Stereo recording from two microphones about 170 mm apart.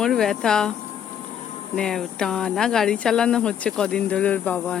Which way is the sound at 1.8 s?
5° left (ahead or behind).